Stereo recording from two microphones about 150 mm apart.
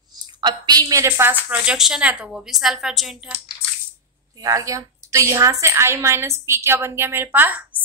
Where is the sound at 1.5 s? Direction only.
5° right (ahead or behind).